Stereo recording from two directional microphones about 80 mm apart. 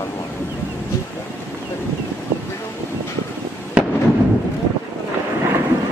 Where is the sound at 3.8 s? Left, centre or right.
Centre.